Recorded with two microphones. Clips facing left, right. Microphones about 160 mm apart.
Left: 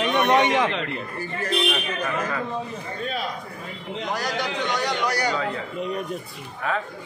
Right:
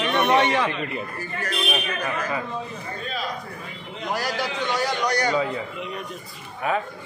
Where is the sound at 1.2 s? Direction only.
30° left (ahead or behind).